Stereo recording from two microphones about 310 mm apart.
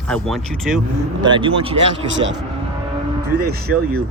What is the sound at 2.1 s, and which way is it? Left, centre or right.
Speech, right.